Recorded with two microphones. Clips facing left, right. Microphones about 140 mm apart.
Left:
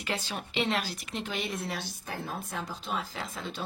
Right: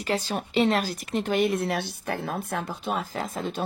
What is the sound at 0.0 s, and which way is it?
Speech, 40° right (ahead or behind).